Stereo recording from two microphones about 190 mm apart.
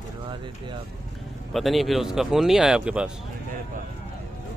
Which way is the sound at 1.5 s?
Centre (ahead or behind).